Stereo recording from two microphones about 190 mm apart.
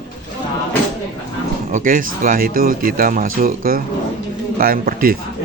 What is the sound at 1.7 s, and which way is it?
A man's voice, 45° right (ahead or behind).